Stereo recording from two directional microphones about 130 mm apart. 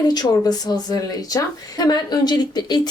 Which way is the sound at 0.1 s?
30° left (ahead or behind).